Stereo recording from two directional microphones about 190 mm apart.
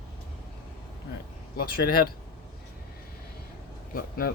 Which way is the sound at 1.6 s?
50° left (ahead or behind).